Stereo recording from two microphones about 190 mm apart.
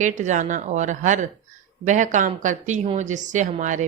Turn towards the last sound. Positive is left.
turn(degrees=-40)  # may be behind; listen again after turning